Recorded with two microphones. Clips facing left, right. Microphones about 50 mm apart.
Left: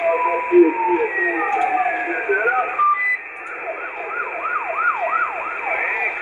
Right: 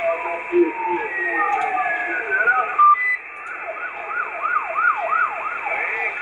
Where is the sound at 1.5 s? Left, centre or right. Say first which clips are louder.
Left 2 dB; centre.